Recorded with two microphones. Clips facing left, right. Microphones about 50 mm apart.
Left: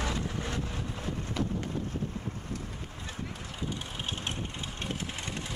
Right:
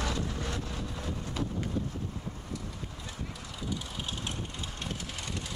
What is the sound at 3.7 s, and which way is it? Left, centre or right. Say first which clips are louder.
Vehicle: right 3 dB; left.